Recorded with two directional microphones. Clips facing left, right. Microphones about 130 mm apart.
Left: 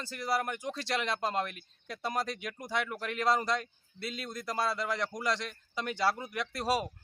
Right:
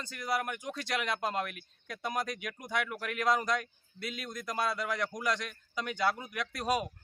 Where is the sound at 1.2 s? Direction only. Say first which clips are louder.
Left 1 dB; centre (ahead or behind).